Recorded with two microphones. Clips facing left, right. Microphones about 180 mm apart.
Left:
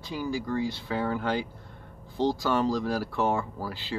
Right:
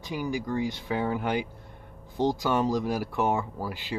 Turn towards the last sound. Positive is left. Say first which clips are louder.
# right 1 dB
turn(degrees=-15)  # may be behind; listen again after turning